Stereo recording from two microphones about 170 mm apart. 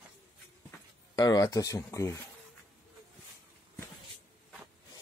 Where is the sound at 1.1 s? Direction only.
20° left (ahead or behind).